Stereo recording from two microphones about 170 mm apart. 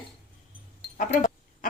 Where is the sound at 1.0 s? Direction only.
50° left (ahead or behind).